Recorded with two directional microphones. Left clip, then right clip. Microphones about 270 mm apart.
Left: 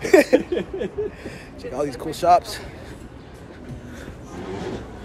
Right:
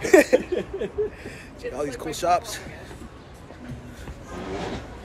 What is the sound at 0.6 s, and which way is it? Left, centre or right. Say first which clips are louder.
Speech: left 1 dB; centre.